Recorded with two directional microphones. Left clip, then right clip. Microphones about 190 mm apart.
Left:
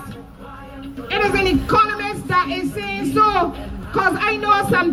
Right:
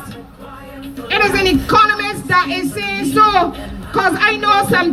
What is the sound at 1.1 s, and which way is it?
Speech, 25° right (ahead or behind).